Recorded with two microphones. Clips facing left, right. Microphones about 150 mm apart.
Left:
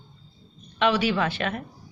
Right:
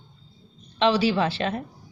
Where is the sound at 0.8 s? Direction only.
30° right (ahead or behind).